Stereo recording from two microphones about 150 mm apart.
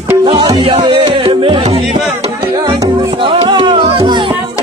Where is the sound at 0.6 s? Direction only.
35° right (ahead or behind).